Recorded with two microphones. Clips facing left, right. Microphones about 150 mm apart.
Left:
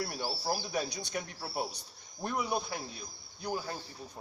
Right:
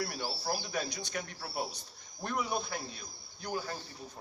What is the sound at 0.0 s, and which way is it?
Speech, 15° left (ahead or behind).